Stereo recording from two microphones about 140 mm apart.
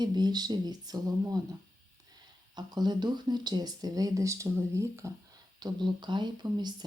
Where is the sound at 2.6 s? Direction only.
30° right (ahead or behind).